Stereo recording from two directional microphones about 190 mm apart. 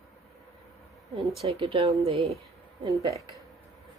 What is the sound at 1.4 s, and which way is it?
A woman's voice, 30° right (ahead or behind).